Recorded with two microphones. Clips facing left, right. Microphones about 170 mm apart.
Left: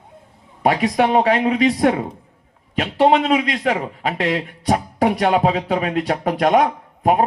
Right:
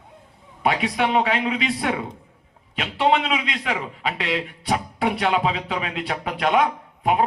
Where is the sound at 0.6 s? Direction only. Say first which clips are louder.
Left 5 dB; 40° left (ahead or behind).